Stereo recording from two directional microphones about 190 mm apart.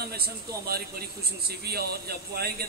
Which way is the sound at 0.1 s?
55° right (ahead or behind).